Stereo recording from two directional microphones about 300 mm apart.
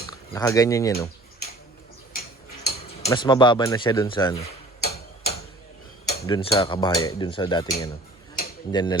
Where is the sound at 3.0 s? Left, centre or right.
Centre.